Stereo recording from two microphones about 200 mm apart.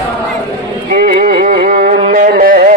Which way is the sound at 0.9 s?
50° right (ahead or behind).